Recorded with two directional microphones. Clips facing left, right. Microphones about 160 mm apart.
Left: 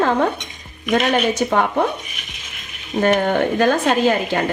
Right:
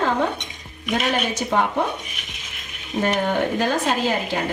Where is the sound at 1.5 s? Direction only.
55° left (ahead or behind).